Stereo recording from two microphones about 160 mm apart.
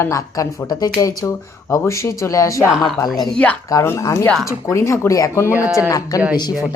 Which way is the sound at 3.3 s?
10° left (ahead or behind).